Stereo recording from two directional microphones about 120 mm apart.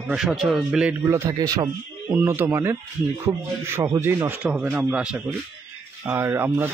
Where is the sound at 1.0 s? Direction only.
25° right (ahead or behind).